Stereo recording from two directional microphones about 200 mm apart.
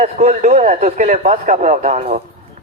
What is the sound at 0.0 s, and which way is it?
A man's voice, 30° right (ahead or behind).